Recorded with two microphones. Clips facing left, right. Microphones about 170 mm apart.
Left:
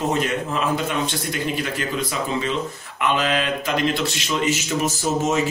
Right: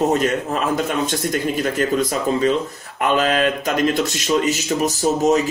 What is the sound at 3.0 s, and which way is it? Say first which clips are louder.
Speech: right 4 dB; 45° right (ahead or behind).